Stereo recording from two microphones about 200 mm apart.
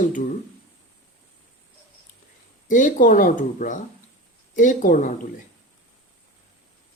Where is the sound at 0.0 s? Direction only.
40° left (ahead or behind).